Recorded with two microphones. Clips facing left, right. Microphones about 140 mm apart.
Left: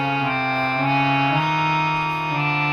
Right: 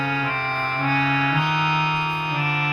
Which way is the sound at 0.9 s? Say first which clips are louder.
Left 2 dB; 25° left (ahead or behind).